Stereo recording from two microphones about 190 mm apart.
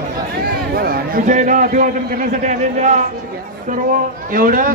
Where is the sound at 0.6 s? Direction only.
50° right (ahead or behind).